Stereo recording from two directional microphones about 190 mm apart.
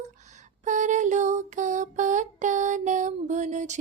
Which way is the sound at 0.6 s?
40° right (ahead or behind).